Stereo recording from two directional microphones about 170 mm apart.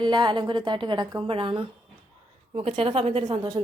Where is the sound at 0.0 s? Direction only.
25° right (ahead or behind).